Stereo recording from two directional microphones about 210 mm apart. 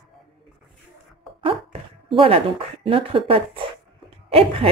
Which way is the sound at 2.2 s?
25° right (ahead or behind).